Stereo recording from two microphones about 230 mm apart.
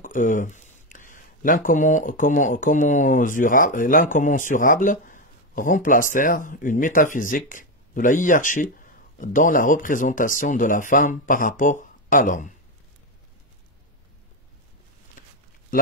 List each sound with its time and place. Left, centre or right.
0.0 s speech: left